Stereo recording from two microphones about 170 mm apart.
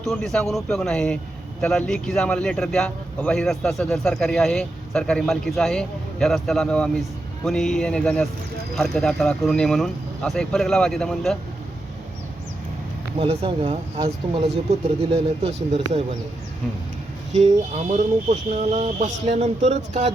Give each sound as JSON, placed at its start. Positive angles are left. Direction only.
{"t": 0.0, "sound": "a man's voice", "side_deg": 0}
{"t": 13.1, "sound": "speech", "side_deg": -35}
{"t": 17.7, "sound": "speech", "side_deg": -40}